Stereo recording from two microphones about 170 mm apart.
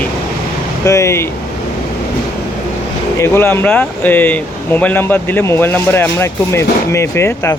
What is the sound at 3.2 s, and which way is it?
Speech, 15° left (ahead or behind).